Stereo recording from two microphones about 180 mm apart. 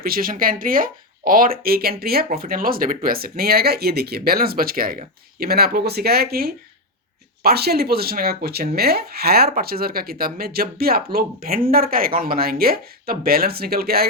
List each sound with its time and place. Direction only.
0.0 s speech: 55° right (ahead or behind)